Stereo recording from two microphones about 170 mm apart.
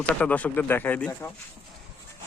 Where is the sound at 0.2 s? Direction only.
10° left (ahead or behind).